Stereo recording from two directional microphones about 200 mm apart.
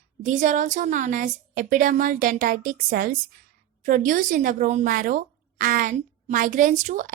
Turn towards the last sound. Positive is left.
turn(degrees=-40)  # may be behind; listen again after turning